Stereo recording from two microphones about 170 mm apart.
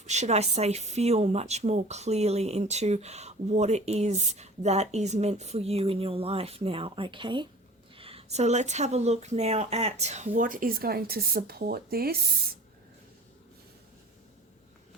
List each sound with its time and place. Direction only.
0.0 s speech: 40° right (ahead or behind); by 12.5 s 65° right (ahead or behind)